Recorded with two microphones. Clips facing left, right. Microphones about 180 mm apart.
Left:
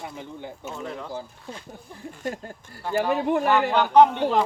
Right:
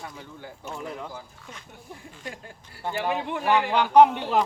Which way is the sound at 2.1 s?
45° left (ahead or behind).